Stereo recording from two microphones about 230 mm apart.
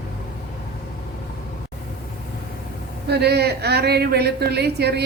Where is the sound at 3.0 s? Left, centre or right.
Right.